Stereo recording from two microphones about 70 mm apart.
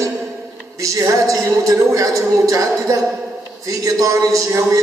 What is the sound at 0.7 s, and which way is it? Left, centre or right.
A woman's voice, right.